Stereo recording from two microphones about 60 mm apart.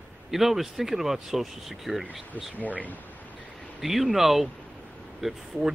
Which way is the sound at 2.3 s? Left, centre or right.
Left.